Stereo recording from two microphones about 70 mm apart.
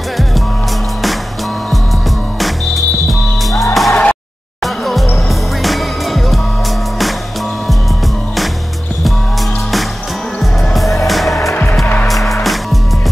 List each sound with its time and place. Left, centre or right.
2.4 s music: centre
10.4 s music: centre
11.8 s music: left
12.1 s music: centre